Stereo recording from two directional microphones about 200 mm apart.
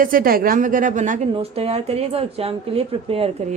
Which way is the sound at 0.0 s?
45° right (ahead or behind).